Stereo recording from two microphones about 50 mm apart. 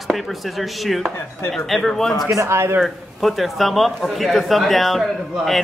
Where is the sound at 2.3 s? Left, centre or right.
Right.